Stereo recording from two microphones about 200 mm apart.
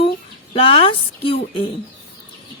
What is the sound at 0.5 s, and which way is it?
Speech, 25° left (ahead or behind).